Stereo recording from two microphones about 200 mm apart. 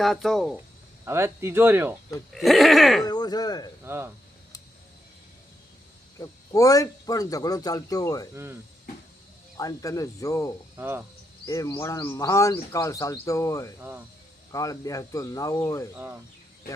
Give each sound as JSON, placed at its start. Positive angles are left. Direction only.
{"t": 0.0, "sound": "speech", "side_deg": 0}
{"t": 1.0, "sound": "speech", "side_deg": -10}
{"t": 2.3, "sound": "speech", "side_deg": 0}
{"t": 3.0, "sound": "speech", "side_deg": 20}
{"t": 3.8, "sound": "speech", "side_deg": -10}
{"t": 6.1, "sound": "speech", "side_deg": 15}
{"t": 9.6, "sound": "speech", "side_deg": 15}
{"t": 10.8, "sound": "speech", "side_deg": -10}
{"t": 11.4, "sound": "speech", "side_deg": 15}